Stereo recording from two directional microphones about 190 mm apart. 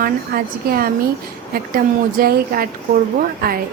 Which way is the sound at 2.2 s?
50° right (ahead or behind).